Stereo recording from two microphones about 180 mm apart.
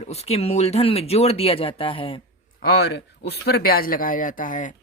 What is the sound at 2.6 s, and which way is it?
Speech, 60° left (ahead or behind).